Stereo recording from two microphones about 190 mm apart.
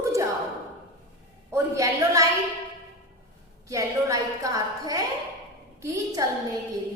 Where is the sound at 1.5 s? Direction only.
15° right (ahead or behind).